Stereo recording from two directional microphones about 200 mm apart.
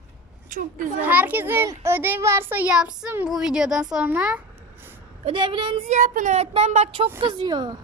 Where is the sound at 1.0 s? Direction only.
10° right (ahead or behind).